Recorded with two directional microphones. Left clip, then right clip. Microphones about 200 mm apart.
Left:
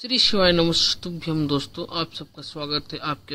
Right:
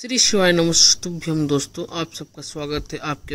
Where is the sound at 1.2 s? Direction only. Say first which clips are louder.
Right 3 dB; 15° right (ahead or behind).